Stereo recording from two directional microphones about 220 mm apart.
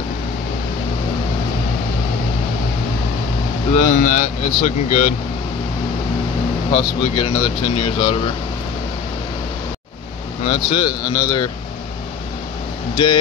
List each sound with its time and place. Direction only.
3.7 s speech: 35° left (ahead or behind)
6.7 s speech: 25° left (ahead or behind)
10.4 s speech: 25° left (ahead or behind)
12.9 s speech: 20° left (ahead or behind)